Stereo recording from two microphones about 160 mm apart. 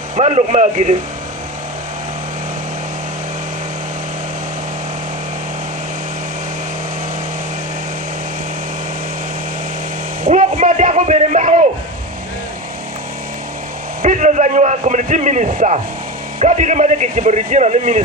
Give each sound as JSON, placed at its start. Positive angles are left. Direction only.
{"t": 0.2, "sound": "speech", "side_deg": -45}
{"t": 10.2, "sound": "a sound", "side_deg": -55}
{"t": 14.0, "sound": "a man's voice", "side_deg": -50}